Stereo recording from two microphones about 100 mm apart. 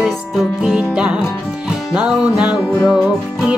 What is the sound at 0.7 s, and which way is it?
Music, 10° right (ahead or behind).